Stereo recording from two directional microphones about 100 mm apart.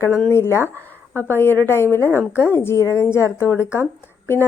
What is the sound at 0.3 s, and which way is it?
A woman's voice, 25° left (ahead or behind).